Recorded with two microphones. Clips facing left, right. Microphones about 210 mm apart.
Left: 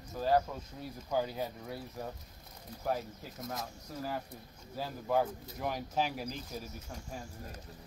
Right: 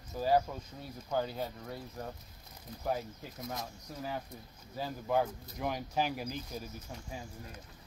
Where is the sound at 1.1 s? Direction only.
5° left (ahead or behind).